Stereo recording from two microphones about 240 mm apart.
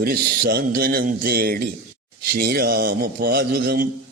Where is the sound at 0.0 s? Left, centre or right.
Right.